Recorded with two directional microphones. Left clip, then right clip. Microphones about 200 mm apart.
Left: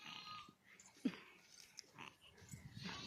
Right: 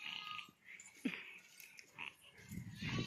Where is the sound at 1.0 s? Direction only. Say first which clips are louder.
Right 2 dB; 5° left (ahead or behind).